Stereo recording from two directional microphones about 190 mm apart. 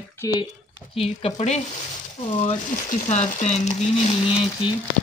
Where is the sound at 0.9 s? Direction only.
30° left (ahead or behind).